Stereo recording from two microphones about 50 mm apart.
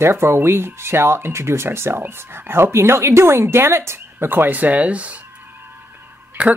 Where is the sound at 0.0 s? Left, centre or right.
Right.